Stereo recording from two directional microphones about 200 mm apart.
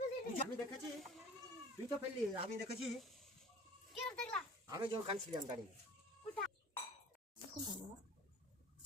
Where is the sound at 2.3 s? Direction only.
30° right (ahead or behind).